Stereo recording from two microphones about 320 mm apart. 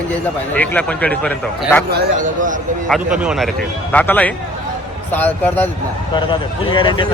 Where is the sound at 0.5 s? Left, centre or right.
Centre.